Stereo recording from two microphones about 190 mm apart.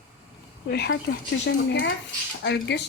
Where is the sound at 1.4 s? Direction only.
75° left (ahead or behind).